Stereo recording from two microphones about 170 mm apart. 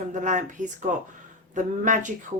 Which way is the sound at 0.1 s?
50° right (ahead or behind).